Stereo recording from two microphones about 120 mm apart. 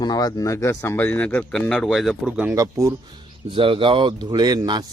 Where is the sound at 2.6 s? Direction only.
25° right (ahead or behind).